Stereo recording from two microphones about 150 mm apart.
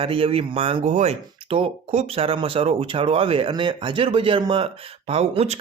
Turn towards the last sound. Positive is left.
turn(degrees=-45)  # may be behind; listen again after turning